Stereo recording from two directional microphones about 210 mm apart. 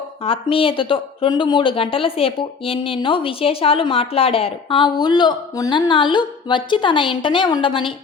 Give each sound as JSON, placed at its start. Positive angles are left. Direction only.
{"t": 0.3, "sound": "speech", "side_deg": 25}